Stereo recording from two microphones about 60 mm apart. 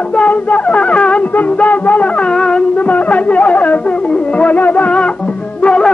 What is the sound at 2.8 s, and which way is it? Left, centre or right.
Music, left.